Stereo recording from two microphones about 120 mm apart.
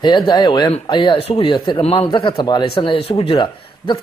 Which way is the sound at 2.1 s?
40° left (ahead or behind).